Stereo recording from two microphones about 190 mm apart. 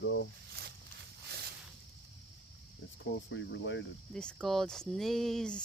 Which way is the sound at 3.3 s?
75° left (ahead or behind).